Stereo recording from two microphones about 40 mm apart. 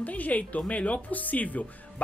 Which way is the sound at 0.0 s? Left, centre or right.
Left.